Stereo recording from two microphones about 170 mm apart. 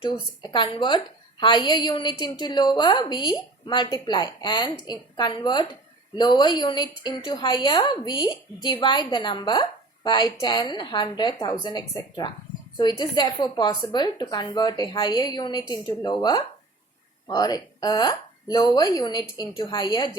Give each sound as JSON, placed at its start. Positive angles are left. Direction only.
{"t": 0.0, "sound": "a woman's voice", "side_deg": 25}